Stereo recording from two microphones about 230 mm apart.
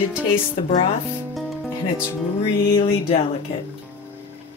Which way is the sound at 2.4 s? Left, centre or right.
Left.